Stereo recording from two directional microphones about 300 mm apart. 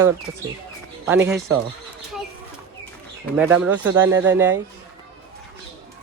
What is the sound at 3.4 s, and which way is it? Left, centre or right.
Speech, centre.